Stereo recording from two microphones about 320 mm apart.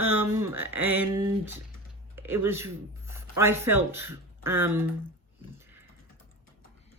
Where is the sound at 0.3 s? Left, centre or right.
Centre.